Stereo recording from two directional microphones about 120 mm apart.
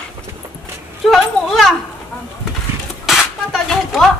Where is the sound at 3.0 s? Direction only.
5° right (ahead or behind).